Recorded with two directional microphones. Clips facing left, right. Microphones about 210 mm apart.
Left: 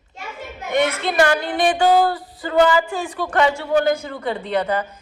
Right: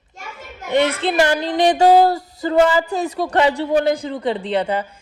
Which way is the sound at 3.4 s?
25° right (ahead or behind).